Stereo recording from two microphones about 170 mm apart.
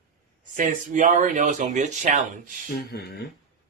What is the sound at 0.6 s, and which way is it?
Speech, 50° right (ahead or behind).